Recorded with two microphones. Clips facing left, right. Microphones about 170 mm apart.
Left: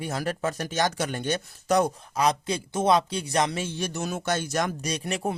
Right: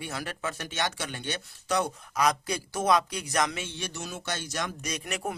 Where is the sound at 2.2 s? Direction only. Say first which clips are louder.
Left 2 dB; 25° left (ahead or behind); by 4.7 s 50° left (ahead or behind).